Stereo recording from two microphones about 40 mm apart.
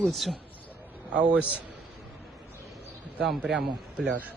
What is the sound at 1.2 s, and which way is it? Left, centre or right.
Speech, right.